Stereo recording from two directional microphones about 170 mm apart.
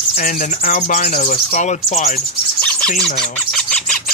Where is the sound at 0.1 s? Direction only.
55° left (ahead or behind).